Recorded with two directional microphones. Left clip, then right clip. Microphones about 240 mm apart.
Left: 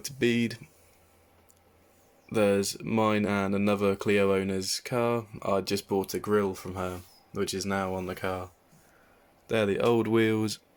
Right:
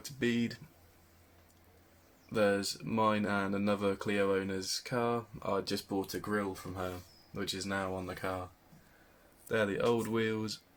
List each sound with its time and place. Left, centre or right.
0.0 s speech: left
2.3 s speech: left
9.5 s speech: left